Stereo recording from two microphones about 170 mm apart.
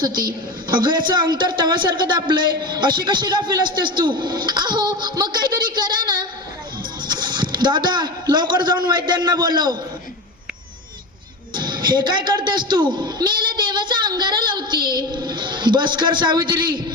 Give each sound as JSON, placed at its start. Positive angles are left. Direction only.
{"t": 0.0, "sound": "a man's voice", "side_deg": -25}
{"t": 11.5, "sound": "a man's voice", "side_deg": -25}